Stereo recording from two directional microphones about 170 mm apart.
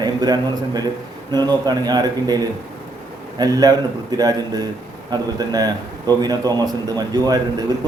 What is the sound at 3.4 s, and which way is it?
A man's voice, 20° right (ahead or behind).